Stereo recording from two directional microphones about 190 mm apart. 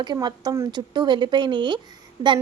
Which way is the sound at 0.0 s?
25° right (ahead or behind).